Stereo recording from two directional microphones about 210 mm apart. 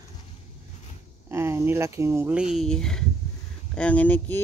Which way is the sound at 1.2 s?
10° right (ahead or behind).